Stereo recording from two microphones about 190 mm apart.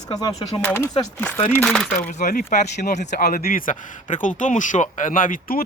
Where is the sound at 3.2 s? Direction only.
50° left (ahead or behind).